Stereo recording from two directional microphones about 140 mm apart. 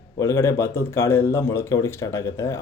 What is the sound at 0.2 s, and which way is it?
Speech, 20° left (ahead or behind).